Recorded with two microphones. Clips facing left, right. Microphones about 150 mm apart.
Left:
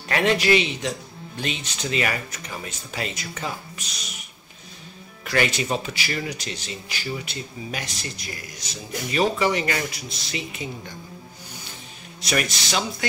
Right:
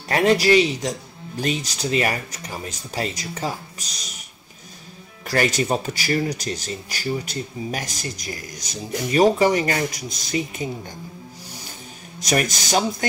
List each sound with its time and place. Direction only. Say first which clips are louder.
0.1 s speech: right 4 dB; 40° right (ahead or behind)
5.2 s speech: right 2 dB; 40° right (ahead or behind)
12.2 s speech: right 3 dB; 40° right (ahead or behind)